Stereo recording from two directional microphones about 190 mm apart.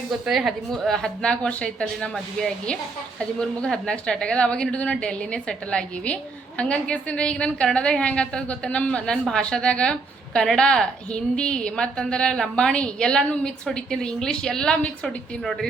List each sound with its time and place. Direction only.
0.3 s a woman's voice: centre (ahead or behind)